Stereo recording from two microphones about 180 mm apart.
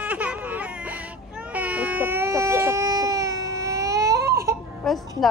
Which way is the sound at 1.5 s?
10° right (ahead or behind).